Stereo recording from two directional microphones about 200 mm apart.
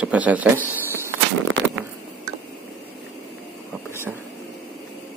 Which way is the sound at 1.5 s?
75° right (ahead or behind).